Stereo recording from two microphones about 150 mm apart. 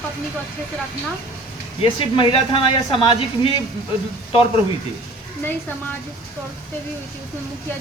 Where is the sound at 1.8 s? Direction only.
35° left (ahead or behind).